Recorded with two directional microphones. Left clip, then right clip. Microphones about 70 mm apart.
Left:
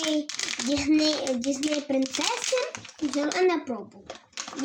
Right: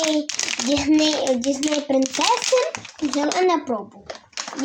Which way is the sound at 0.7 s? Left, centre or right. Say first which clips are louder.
Right 5 dB; right.